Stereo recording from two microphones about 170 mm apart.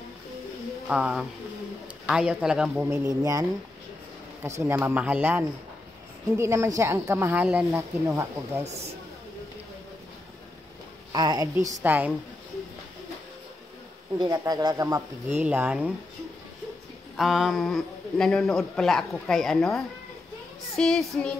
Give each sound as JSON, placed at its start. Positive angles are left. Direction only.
{"t": 0.8, "sound": "a man's voice", "side_deg": -5}
{"t": 3.2, "sound": "speech", "side_deg": -20}
{"t": 11.1, "sound": "speech", "side_deg": -25}
{"t": 11.8, "sound": "speech", "side_deg": -10}
{"t": 14.2, "sound": "speech", "side_deg": -20}
{"t": 15.4, "sound": "speech", "side_deg": -10}
{"t": 17.2, "sound": "a man's voice", "side_deg": 0}